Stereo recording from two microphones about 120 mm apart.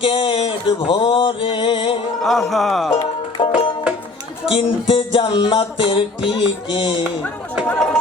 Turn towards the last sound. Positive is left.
turn(degrees=5)  # may be behind; listen again after turning